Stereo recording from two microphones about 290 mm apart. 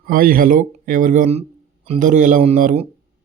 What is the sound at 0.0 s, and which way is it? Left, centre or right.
Speech, right.